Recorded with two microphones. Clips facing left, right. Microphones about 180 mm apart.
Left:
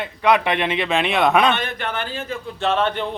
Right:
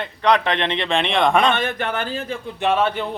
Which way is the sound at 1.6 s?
45° right (ahead or behind).